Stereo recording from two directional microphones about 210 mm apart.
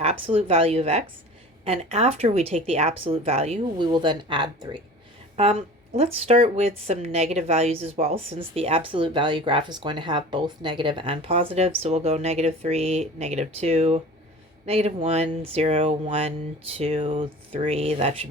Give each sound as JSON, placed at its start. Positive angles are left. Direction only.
{"t": 0.0, "sound": "speech", "side_deg": -30}